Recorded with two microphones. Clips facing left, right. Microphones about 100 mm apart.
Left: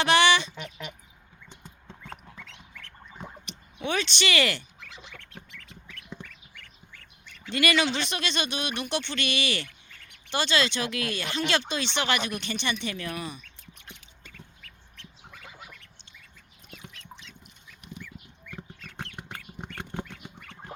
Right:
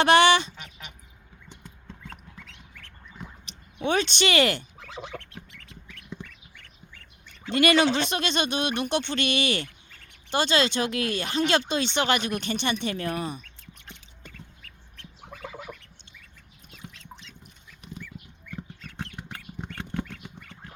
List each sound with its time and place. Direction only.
0.0 s speech: 45° right (ahead or behind)
1.6 s horse: 30° left (ahead or behind)
3.8 s speech: 45° right (ahead or behind)
7.5 s speech: 40° right (ahead or behind)